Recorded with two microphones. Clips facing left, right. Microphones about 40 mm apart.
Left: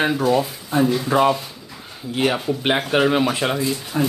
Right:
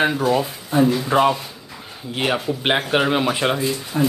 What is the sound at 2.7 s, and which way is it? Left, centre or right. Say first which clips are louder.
Speech: left 1 dB; centre.